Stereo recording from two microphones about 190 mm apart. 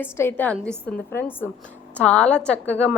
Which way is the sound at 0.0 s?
10° left (ahead or behind).